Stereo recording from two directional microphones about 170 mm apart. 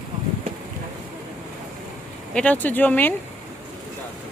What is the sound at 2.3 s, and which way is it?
Speech, 10° left (ahead or behind).